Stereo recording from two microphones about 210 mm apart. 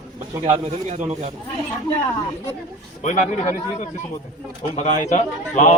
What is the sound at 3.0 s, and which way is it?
A man's voice, 35° left (ahead or behind).